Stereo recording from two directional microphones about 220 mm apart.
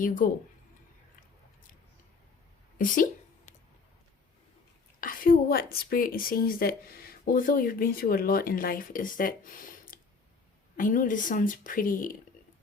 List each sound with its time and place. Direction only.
0.0 s a woman's voice: 35° left (ahead or behind)
2.7 s speech: 40° left (ahead or behind)
4.9 s a woman's voice: 40° left (ahead or behind)